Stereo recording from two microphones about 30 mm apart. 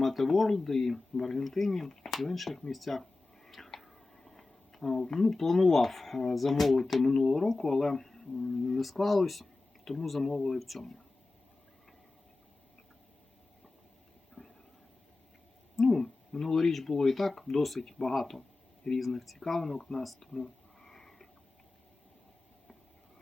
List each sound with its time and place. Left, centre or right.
0.0 s speech: centre
3.4 s speech: centre
10.6 s speech: centre
14.4 s a sound: left
15.7 s owl: centre
16.0 s speech: centre
20.1 s whispering: centre